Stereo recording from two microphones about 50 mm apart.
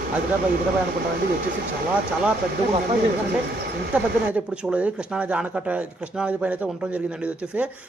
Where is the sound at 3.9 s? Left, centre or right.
Right.